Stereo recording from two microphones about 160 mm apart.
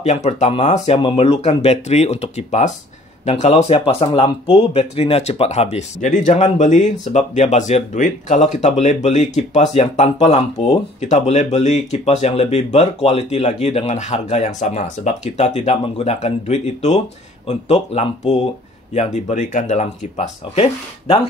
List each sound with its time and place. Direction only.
0.0 s speech: 45° left (ahead or behind)